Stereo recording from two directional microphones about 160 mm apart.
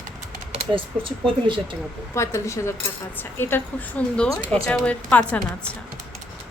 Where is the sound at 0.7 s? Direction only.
35° right (ahead or behind).